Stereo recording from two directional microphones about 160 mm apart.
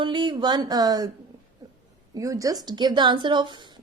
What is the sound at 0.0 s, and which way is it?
A woman's voice, 30° right (ahead or behind).